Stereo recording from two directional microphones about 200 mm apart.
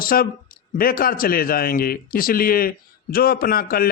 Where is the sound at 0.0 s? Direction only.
45° left (ahead or behind).